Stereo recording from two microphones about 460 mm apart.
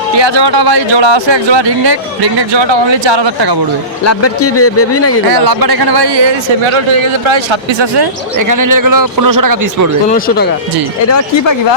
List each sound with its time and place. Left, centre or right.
0.2 s speech: right
3.1 s speech: right
4.0 s a man's voice: left
5.5 s speech: right
6.7 s a man's voice: right
8.4 s a man's voice: right
10.1 s a man's voice: centre